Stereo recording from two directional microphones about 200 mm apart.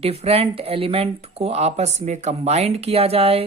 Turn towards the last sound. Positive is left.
turn(degrees=-30)  # may be behind; listen again after turning